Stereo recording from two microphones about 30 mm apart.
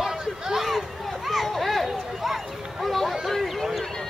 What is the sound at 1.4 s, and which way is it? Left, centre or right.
Children playing, centre.